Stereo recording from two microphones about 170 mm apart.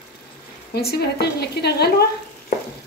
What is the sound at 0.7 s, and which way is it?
A woman's voice, 70° left (ahead or behind).